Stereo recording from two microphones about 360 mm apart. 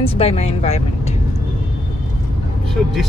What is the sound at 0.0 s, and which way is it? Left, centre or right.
Speech, centre.